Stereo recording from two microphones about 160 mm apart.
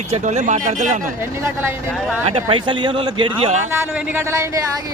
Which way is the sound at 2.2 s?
35° right (ahead or behind).